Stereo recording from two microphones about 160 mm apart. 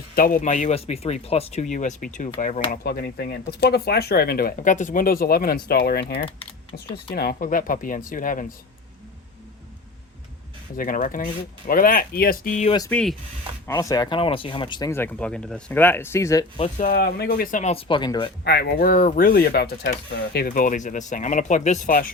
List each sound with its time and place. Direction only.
0.2 s speech: 60° left (ahead or behind); by 6.2 s 75° left (ahead or behind)
6.2 s typing: 35° left (ahead or behind)
6.9 s speech: 80° left; by 8.5 s 55° left (ahead or behind)
10.8 s speech: 60° left (ahead or behind)
12.9 s speech: 5° left (ahead or behind)
13.7 s speech: 20° left (ahead or behind)
14.8 s speech: 15° left (ahead or behind)
16.6 s speech: 45° left (ahead or behind)
16.8 s speech: 70° left (ahead or behind); by 18.3 s 30° left (ahead or behind)
18.4 s speech: 85° left; by 22.0 s 55° left (ahead or behind)